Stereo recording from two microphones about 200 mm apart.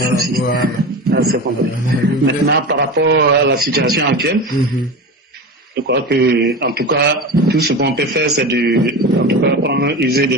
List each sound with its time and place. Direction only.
1.1 s a sound: 50° right (ahead or behind)
2.2 s speech: 55° right (ahead or behind)
5.9 s speech: 60° right (ahead or behind)